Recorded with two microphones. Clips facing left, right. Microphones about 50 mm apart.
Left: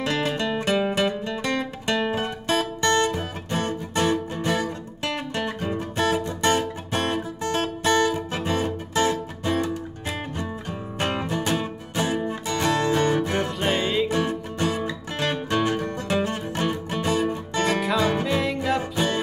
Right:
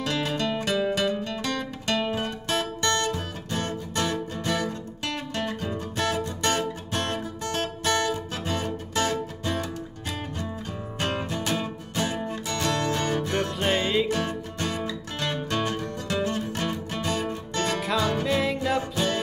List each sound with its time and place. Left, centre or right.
0.0 s music: left
17.7 s music: centre
18.8 s music: left